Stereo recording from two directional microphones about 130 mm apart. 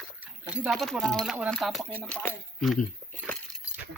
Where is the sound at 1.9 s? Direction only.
15° left (ahead or behind).